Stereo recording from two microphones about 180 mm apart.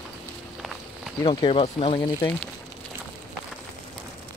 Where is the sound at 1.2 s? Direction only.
25° left (ahead or behind).